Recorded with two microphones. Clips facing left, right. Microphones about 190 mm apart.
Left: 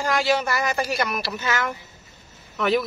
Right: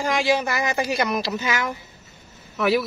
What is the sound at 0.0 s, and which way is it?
A woman's voice, 15° right (ahead or behind).